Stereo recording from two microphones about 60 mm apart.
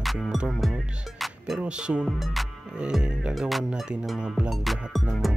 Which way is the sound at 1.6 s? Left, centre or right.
Centre.